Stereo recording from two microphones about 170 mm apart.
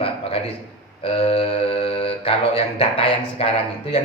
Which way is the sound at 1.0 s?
35° left (ahead or behind).